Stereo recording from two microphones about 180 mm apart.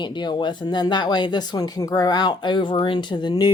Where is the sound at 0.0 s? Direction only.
25° left (ahead or behind).